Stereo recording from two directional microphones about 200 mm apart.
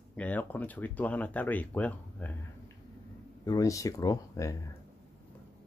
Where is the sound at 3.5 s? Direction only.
15° left (ahead or behind).